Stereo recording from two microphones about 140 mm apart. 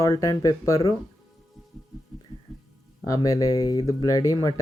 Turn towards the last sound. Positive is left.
turn(degrees=25)  # may be behind; listen again after turning